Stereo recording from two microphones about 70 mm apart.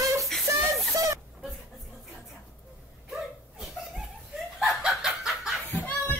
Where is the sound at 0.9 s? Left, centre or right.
Right.